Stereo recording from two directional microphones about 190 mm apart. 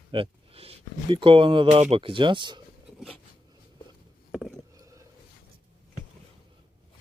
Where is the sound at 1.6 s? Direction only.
35° right (ahead or behind).